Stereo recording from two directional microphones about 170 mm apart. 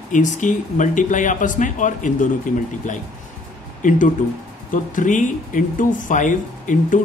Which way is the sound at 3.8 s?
50° left (ahead or behind).